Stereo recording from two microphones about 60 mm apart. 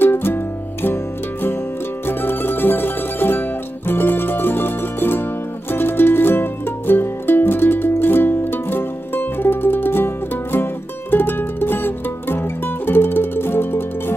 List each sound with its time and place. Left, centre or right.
0.0 s music: left
2.0 s music: left